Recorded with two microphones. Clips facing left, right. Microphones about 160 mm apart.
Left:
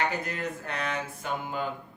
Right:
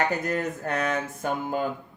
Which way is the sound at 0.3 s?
45° right (ahead or behind).